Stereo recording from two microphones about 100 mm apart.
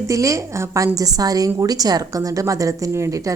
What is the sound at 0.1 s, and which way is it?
A woman's voice, 35° right (ahead or behind).